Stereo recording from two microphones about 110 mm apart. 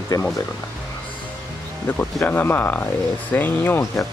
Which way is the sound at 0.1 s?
35° left (ahead or behind).